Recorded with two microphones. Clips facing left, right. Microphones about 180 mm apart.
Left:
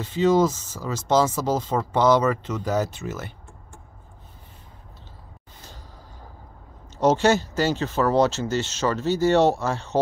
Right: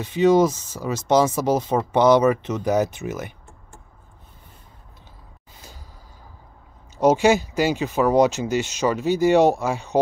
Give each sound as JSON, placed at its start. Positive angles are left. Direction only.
{"t": 0.0, "sound": "speech", "side_deg": -15}
{"t": 7.0, "sound": "speech", "side_deg": -10}